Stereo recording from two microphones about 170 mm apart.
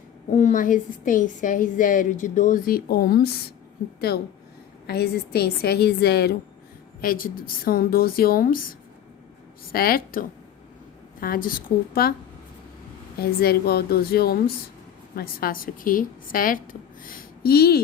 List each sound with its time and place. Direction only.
0.3 s a woman's voice: 45° left (ahead or behind); by 6.3 s 65° left (ahead or behind)
7.0 s a woman's voice: 55° left (ahead or behind)
9.7 s a woman's voice: 60° left (ahead or behind)
13.1 s a woman's voice: 60° left (ahead or behind)